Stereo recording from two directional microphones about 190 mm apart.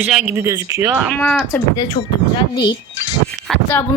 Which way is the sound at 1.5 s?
10° left (ahead or behind).